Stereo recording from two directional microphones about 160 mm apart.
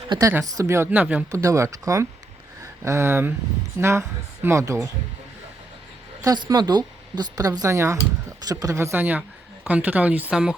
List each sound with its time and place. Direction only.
0.1 s speech: 20° right (ahead or behind)
1.3 s speech: 20° right (ahead or behind)
6.2 s speech: 25° right (ahead or behind); by 10.5 s 5° right (ahead or behind)